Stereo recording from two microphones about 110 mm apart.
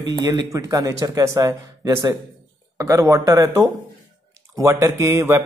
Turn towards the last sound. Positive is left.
turn(degrees=-25)  # may be behind; listen again after turning